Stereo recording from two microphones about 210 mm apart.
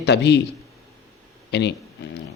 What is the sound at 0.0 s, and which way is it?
Speech, 55° left (ahead or behind).